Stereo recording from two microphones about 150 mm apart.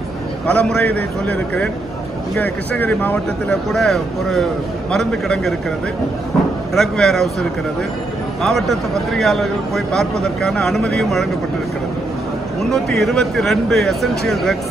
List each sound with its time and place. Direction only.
0.5 s speech: 5° left (ahead or behind)
6.7 s speech: 5° left (ahead or behind)
8.4 s speech: centre (ahead or behind)
12.7 s speech: centre (ahead or behind)